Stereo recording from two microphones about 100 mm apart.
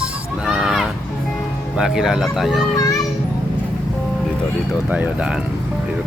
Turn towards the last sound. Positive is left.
turn(degrees=-10)  # may be behind; listen again after turning